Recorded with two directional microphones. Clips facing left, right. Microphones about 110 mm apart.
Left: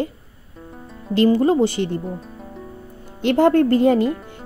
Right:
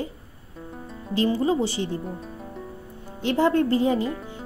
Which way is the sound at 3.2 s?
60° left (ahead or behind).